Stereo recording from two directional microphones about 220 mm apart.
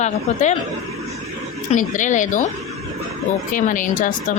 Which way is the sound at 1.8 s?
35° left (ahead or behind).